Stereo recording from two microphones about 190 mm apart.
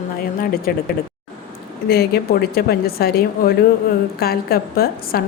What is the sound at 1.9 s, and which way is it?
A woman's voice, 55° left (ahead or behind).